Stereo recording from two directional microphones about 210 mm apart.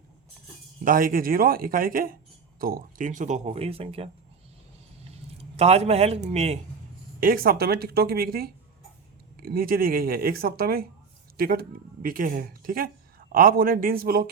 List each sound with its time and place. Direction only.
0.9 s speech: 40° right (ahead or behind)
5.4 s speech: 30° right (ahead or behind)
7.2 s a man's voice: 45° right (ahead or behind)